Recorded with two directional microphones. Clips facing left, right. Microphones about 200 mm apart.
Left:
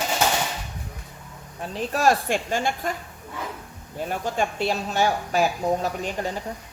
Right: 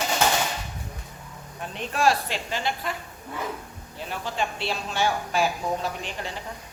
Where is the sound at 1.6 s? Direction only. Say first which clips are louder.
Left 2 dB; 35° left (ahead or behind).